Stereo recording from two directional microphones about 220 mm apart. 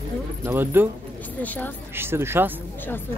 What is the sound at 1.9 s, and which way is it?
Speech, 10° right (ahead or behind).